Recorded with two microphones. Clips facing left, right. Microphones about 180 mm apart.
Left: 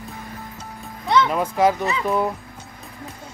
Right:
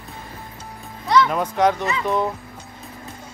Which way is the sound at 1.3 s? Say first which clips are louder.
Even; 5° left (ahead or behind).